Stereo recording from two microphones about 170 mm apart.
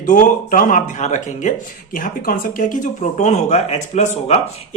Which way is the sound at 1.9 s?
55° left (ahead or behind).